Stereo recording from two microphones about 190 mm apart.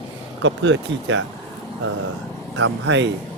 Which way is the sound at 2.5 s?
75° right (ahead or behind).